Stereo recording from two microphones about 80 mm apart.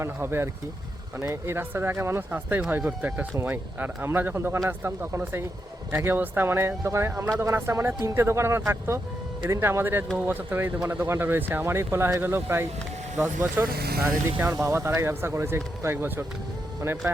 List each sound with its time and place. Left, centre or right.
0.0 s speech: right
2.3 s speech: right